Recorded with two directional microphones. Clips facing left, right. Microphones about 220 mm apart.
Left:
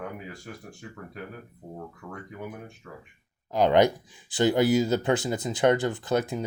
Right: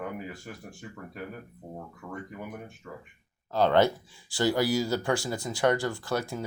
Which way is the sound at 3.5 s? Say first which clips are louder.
Left 2 dB; 15° left (ahead or behind).